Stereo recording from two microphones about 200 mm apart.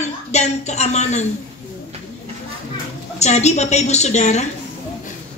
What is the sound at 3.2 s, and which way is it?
Speech, 35° left (ahead or behind).